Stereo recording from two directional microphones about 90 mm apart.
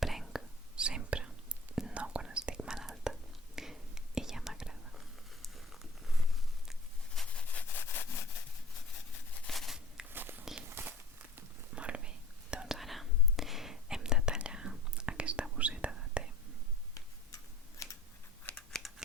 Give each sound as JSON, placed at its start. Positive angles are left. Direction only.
{"t": 0.0, "sound": "whispering", "side_deg": -5}
{"t": 7.2, "sound": "rub", "side_deg": 15}
{"t": 9.5, "sound": "a sound", "side_deg": 0}
{"t": 10.1, "sound": "walk", "side_deg": -25}
{"t": 11.3, "sound": "whispering", "side_deg": -15}
{"t": 16.9, "sound": "tick-tock", "side_deg": 35}
{"t": 18.5, "sound": "scissors", "side_deg": 5}